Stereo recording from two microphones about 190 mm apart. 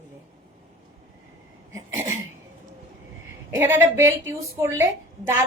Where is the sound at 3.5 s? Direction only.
15° right (ahead or behind).